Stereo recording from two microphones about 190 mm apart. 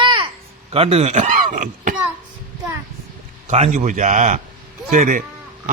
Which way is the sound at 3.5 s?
40° right (ahead or behind).